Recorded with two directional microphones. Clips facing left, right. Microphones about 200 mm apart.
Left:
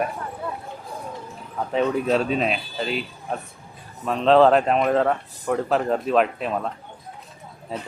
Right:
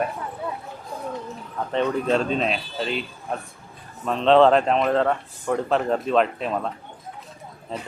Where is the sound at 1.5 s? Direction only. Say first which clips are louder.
Left 1 dB; 5° left (ahead or behind).